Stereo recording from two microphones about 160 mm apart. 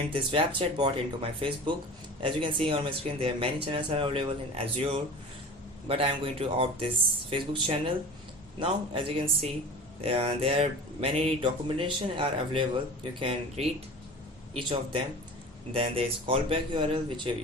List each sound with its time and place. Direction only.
0.1 s speech: 30° right (ahead or behind)